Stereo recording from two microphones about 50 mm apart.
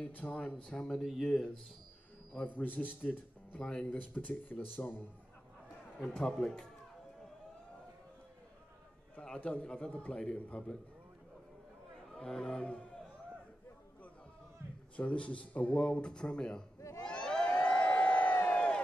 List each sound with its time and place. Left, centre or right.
0.0 s a man's voice: left; by 1.0 s centre
2.4 s speech: left
3.5 s speech: centre; by 5.0 s left
5.9 s a man's voice: centre
6.2 s speech: centre
9.2 s a man's voice: left
12.1 s speech: centre
15.0 s a man's voice: left
17.0 s crowd: centre